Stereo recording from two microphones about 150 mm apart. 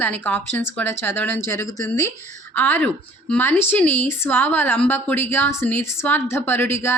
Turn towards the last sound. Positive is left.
turn(degrees=15)  # may be behind; listen again after turning